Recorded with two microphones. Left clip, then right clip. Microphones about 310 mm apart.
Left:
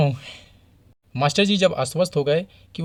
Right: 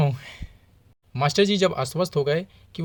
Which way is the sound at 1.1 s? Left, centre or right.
Right.